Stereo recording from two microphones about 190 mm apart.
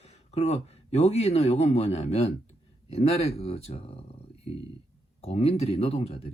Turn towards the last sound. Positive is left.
turn(degrees=35)  # may be behind; listen again after turning